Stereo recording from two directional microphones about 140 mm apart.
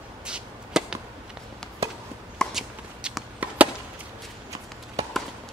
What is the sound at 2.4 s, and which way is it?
Chop, 5° right (ahead or behind).